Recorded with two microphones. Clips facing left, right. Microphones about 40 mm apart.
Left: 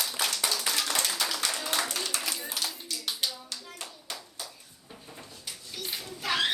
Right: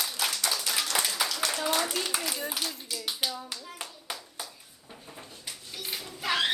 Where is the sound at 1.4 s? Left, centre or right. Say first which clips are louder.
Right 2 dB; centre.